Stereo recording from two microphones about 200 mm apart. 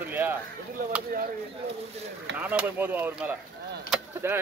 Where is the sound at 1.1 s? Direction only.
45° right (ahead or behind).